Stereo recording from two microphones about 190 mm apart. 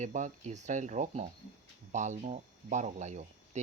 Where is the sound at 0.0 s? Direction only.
40° right (ahead or behind).